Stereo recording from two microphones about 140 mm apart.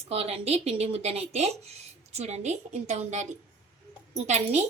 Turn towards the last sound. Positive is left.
turn(degrees=-55)  # may be behind; listen again after turning